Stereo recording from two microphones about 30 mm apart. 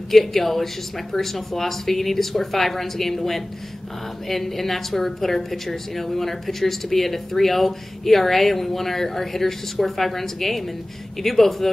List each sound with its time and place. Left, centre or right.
0.1 s a woman's voice: centre